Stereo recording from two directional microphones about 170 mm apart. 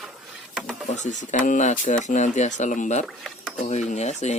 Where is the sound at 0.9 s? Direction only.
45° left (ahead or behind).